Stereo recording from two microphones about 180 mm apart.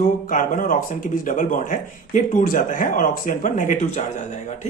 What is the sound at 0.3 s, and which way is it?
A man's voice, 45° left (ahead or behind).